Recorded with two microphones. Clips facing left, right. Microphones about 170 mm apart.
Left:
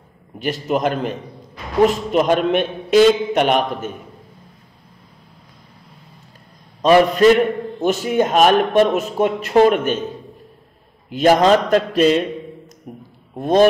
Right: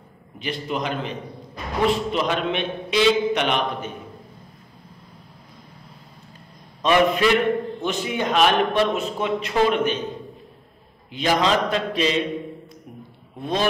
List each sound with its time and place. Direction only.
0.4 s a man's voice: 45° left (ahead or behind)
6.8 s a man's voice: 40° left (ahead or behind)
11.1 s a man's voice: 45° left (ahead or behind)
12.9 s a sound: 50° left (ahead or behind)
13.4 s a man's voice: 45° left (ahead or behind)